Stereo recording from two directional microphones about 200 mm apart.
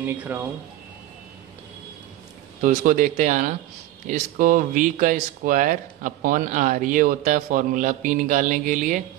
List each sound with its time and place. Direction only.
0.0 s speech: 10° right (ahead or behind)
2.6 s speech: 40° right (ahead or behind)